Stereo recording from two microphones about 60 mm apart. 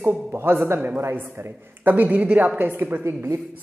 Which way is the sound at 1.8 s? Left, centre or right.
Right.